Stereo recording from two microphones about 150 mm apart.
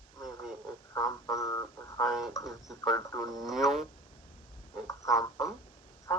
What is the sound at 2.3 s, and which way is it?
Speech, 20° left (ahead or behind).